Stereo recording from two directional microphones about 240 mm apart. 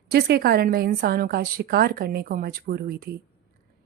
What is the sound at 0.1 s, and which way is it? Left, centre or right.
Speech, right.